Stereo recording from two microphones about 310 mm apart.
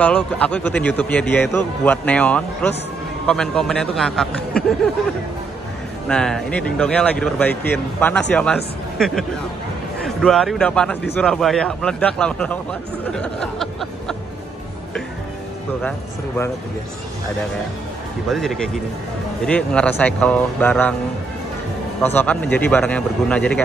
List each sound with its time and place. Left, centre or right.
0.0 s a man's voice: centre
6.0 s a man's voice: centre
18.3 s a man's voice: centre
22.0 s a man's voice: centre